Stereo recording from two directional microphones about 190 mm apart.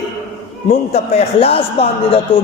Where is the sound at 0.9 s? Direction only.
35° left (ahead or behind).